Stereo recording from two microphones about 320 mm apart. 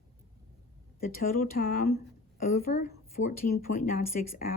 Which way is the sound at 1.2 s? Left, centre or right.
Left.